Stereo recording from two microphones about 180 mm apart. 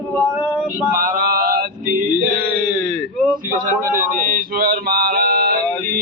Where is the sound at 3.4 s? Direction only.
50° right (ahead or behind).